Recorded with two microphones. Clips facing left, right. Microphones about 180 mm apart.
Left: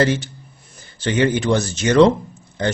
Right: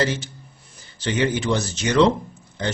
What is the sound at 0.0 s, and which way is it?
Speech, 55° left (ahead or behind).